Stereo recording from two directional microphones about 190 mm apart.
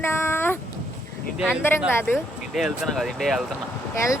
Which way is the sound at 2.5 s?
Centre (ahead or behind).